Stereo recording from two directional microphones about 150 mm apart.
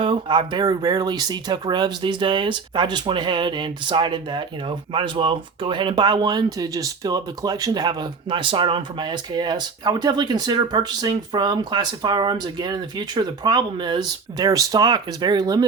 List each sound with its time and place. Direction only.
0.0 s speech: 35° right (ahead or behind)